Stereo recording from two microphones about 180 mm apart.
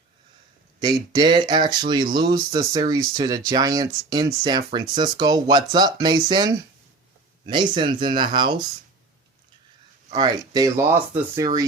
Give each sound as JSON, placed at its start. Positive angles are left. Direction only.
{"t": 0.8, "sound": "speech", "side_deg": -20}
{"t": 10.2, "sound": "speech", "side_deg": -20}